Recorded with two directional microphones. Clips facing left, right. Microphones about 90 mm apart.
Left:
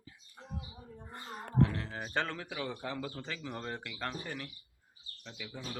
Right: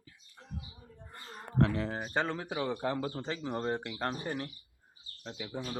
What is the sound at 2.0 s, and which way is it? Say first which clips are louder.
Speech: right 3 dB; 15° right (ahead or behind).